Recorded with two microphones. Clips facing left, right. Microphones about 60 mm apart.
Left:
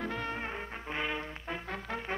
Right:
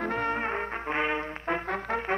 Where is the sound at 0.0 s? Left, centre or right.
Right.